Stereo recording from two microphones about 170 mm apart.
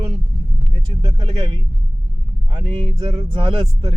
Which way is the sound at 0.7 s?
30° right (ahead or behind).